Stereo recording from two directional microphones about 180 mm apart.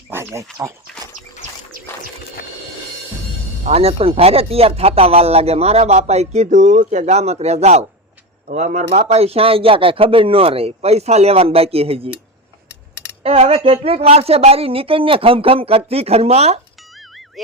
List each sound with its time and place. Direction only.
0.1 s a sound: 15° right (ahead or behind)
3.6 s speech: 35° right (ahead or behind)
13.2 s speech: 35° right (ahead or behind)
17.4 s speech: centre (ahead or behind)